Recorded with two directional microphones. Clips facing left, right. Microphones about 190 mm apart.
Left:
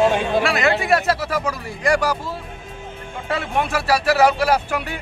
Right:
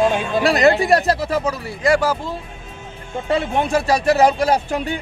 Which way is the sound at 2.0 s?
15° left (ahead or behind).